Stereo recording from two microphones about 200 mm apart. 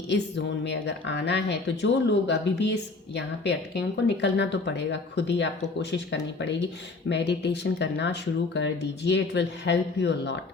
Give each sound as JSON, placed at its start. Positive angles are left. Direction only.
{"t": 0.1, "sound": "speech", "side_deg": 60}